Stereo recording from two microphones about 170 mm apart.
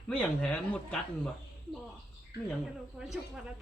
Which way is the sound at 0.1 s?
5° left (ahead or behind).